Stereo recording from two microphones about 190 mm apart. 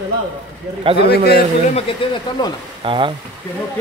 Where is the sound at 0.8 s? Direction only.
30° right (ahead or behind).